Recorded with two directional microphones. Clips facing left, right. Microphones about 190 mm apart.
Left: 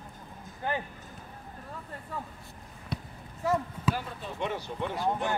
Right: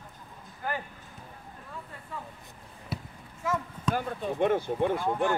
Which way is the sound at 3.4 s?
35° left (ahead or behind).